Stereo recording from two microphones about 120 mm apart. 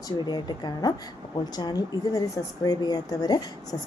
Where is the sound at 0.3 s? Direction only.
35° left (ahead or behind).